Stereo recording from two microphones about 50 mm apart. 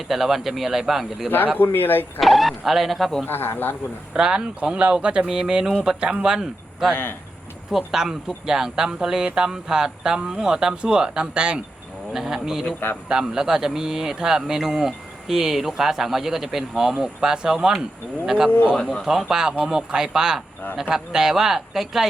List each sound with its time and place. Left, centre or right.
0.1 s speech: centre
1.5 s speech: left
2.2 s speech: centre
3.2 s speech: left
4.1 s speech: centre
5.2 s a man's voice: centre
6.9 s speech: left
7.7 s a man's voice: centre
19.0 s a man's voice: centre